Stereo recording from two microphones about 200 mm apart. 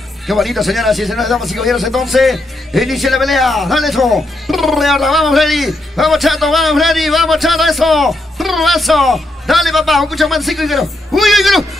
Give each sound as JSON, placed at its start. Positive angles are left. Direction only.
{"t": 0.3, "sound": "speech", "side_deg": 0}